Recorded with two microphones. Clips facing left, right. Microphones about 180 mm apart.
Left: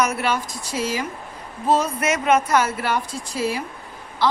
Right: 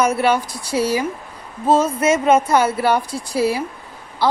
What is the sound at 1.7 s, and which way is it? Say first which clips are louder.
Speech: right 5 dB; 25° right (ahead or behind).